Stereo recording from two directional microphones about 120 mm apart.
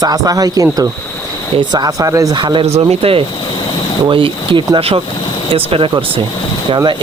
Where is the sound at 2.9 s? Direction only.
55° right (ahead or behind).